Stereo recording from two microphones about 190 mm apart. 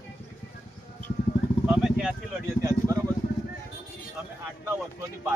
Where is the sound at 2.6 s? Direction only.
15° right (ahead or behind).